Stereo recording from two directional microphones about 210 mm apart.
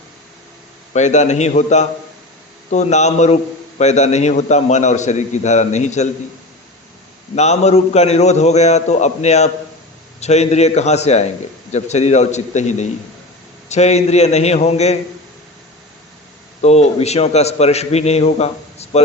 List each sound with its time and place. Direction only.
0.9 s a man's voice: 35° left (ahead or behind)
7.3 s a man's voice: 30° left (ahead or behind)
16.6 s a man's voice: 30° left (ahead or behind)